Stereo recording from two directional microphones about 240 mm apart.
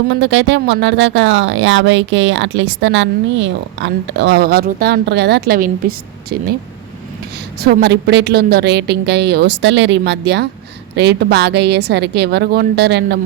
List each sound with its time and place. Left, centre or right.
0.1 s speech: right
7.6 s speech: right